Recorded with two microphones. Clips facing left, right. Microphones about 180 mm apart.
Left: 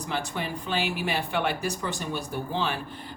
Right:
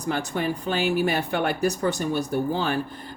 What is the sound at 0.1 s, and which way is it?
Speech, 45° right (ahead or behind).